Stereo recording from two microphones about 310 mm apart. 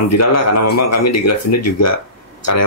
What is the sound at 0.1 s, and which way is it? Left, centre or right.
Speech, left.